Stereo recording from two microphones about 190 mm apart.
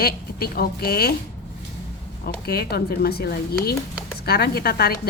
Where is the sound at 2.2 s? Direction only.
55° left (ahead or behind).